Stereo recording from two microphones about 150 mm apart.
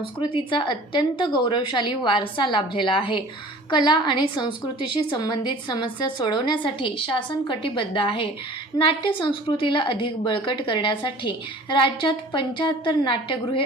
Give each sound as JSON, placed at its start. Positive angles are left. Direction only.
{"t": 0.5, "sound": "a woman's voice", "side_deg": 30}